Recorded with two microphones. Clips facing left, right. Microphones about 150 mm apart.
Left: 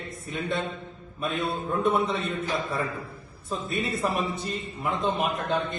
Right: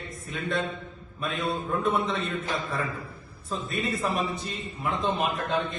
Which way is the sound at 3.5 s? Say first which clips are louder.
Left 1 dB; centre (ahead or behind).